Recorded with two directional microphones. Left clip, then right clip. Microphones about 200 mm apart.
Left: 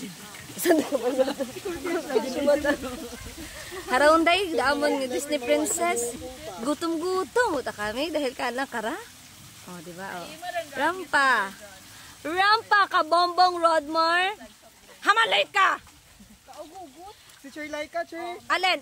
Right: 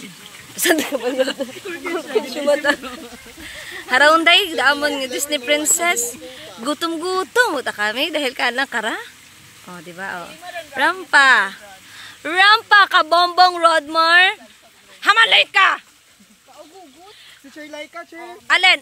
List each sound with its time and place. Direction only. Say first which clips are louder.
0.6 s speech: right 5 dB; centre (ahead or behind)
0.8 s speech: right 5 dB; 25° right (ahead or behind)
3.9 s speech: right 7 dB; 5° right (ahead or behind)
17.6 s speech: left 1 dB; 10° left (ahead or behind)